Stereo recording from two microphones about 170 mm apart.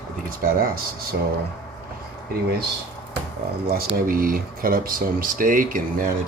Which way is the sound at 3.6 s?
60° right (ahead or behind).